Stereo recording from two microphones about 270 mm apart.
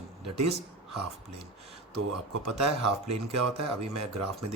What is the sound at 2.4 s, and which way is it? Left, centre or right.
A man's voice, right.